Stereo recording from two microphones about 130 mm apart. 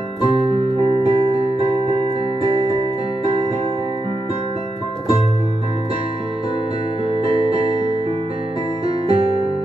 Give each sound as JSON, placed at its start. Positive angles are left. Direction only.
{"t": 0.2, "sound": "music", "side_deg": -50}
{"t": 7.1, "sound": "music", "side_deg": -45}